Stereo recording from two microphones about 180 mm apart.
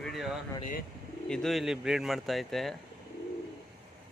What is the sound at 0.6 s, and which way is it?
Speech, 50° left (ahead or behind).